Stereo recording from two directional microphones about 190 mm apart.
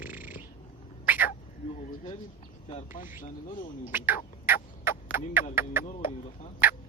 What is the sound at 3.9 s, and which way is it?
Turkey, 10° right (ahead or behind).